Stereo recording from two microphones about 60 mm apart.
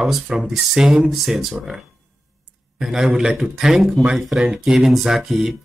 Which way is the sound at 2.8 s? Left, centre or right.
Centre.